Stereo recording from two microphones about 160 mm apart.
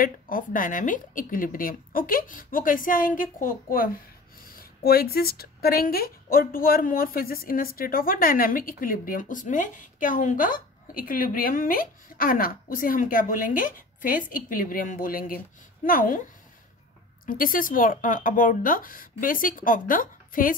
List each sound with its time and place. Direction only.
0.0 s speech: 60° left (ahead or behind)
17.3 s speech: 60° left (ahead or behind)